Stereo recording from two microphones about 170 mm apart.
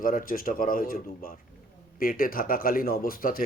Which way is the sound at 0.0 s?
55° left (ahead or behind).